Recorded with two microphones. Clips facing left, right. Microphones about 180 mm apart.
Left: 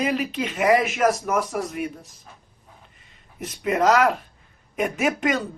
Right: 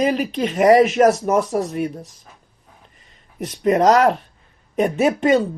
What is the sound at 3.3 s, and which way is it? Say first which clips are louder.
Speech: right 6 dB; 35° right (ahead or behind).